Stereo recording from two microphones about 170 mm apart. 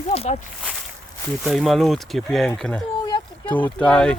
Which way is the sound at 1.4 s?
Centre (ahead or behind).